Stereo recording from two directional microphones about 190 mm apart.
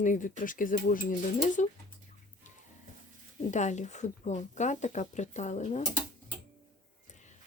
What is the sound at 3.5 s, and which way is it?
Speech, 40° left (ahead or behind).